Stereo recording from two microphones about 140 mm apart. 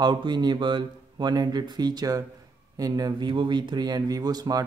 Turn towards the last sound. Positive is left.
turn(degrees=-25)  # may be behind; listen again after turning